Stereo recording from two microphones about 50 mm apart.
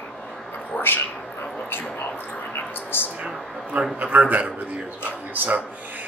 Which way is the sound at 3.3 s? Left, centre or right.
Centre.